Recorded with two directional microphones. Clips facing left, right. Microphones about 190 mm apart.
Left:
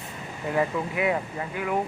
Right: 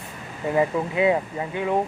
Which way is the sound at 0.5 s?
20° right (ahead or behind).